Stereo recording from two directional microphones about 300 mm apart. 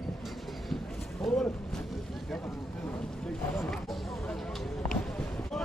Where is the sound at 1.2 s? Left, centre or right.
Centre.